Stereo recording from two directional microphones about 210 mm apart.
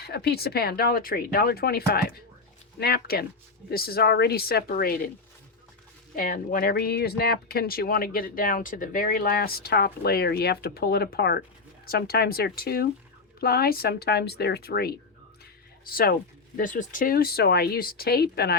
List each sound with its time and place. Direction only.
0.0 s speech: 50° left (ahead or behind)
6.1 s speech: 40° left (ahead or behind)